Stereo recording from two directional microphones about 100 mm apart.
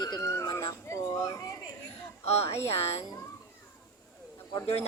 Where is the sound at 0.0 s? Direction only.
35° left (ahead or behind).